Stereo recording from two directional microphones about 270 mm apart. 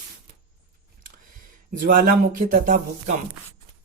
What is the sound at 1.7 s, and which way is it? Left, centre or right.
Speech, right.